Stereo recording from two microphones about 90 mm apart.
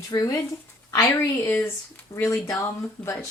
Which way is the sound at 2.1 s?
30° left (ahead or behind).